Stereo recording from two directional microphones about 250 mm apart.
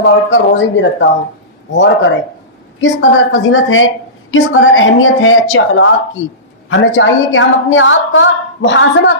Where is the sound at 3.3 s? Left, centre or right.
Left.